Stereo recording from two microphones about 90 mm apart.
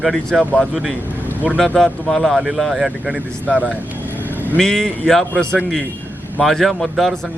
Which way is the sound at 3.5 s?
15° right (ahead or behind).